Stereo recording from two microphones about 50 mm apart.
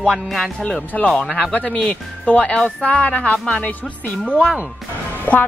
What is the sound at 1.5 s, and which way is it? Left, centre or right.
Speech, left.